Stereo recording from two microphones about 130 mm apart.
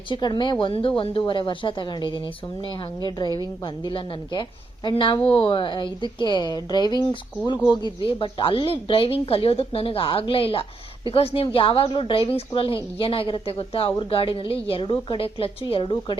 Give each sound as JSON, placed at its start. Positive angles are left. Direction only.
{"t": 0.1, "sound": "a woman's voice", "side_deg": 35}